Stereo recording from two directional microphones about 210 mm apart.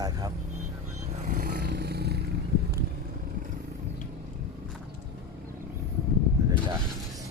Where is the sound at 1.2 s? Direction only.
35° right (ahead or behind).